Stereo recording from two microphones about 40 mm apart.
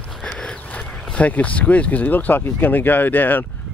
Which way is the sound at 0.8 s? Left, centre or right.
Left.